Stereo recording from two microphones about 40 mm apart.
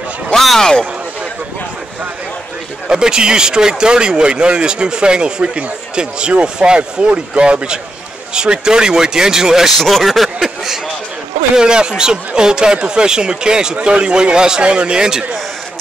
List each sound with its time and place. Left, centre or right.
0.3 s a sound: centre
2.9 s speech: centre
9.8 s speech: centre
11.5 s speech: right